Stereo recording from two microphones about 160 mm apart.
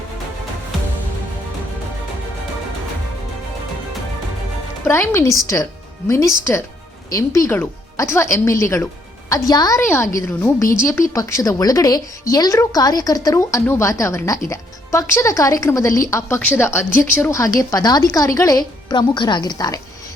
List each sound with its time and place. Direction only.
4.9 s speech: 15° left (ahead or behind)